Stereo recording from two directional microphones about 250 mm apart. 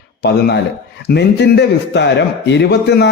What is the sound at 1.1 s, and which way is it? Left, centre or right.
A man's voice, left.